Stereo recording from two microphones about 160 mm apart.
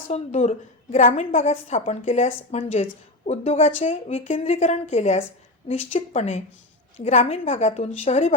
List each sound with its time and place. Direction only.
0.1 s a woman's voice: 45° left (ahead or behind)